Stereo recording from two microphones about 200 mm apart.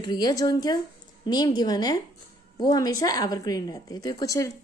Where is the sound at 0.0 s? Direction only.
20° left (ahead or behind).